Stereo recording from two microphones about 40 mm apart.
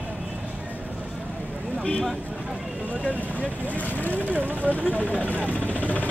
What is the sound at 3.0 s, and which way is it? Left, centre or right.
Speech, left.